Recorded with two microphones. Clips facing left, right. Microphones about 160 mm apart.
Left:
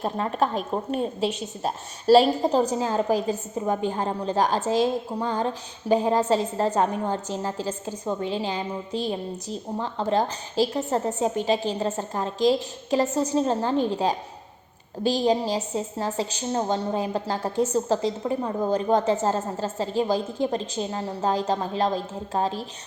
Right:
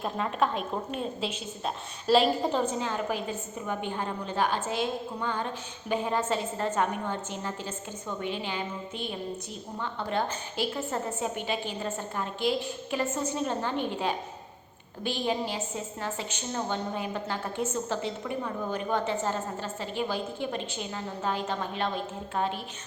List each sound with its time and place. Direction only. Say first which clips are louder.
0.0 s a woman's voice: left 4 dB; 35° left (ahead or behind)